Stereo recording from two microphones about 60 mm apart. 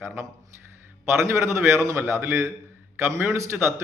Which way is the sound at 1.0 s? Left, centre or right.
Right.